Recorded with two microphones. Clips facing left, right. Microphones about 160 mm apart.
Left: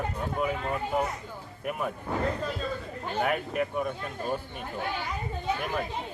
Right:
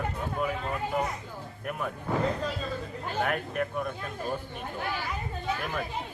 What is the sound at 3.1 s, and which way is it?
Speech, 5° left (ahead or behind).